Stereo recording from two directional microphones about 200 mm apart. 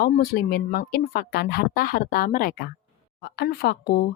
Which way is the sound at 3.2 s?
55° left (ahead or behind).